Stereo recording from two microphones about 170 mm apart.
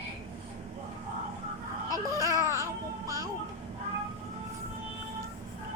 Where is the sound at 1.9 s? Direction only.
20° right (ahead or behind).